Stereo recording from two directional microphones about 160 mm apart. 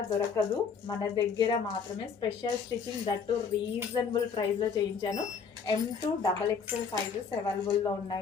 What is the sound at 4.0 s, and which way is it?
Speech, 25° left (ahead or behind).